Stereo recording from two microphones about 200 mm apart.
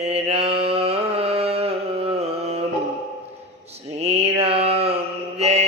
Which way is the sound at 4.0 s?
30° right (ahead or behind).